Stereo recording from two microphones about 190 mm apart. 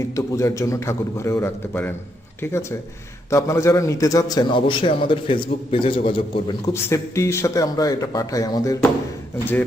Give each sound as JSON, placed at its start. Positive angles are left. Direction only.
{"t": 0.2, "sound": "a man's voice", "side_deg": 15}
{"t": 6.9, "sound": "a man's voice", "side_deg": 15}